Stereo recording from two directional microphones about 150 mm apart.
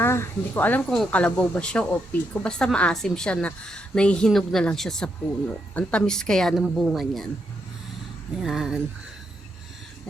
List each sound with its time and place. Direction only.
0.0 s a woman's voice: 15° left (ahead or behind); by 7.3 s centre (ahead or behind)
8.4 s a woman's voice: 5° right (ahead or behind)